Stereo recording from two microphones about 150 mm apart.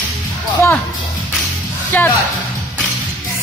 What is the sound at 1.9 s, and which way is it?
Speech, 15° left (ahead or behind).